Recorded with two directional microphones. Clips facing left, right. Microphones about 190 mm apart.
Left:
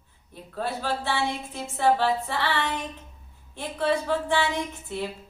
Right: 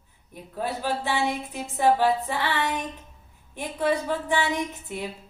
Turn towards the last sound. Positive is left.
turn(degrees=-15)  # may be behind; listen again after turning